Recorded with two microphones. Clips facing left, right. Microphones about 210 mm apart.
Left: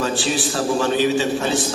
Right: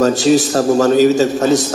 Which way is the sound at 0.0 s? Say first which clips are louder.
Right 10 dB; 40° right (ahead or behind).